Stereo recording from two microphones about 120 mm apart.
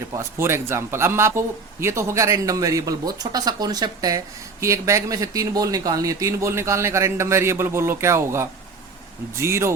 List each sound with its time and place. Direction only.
0.1 s a man's voice: 20° right (ahead or behind)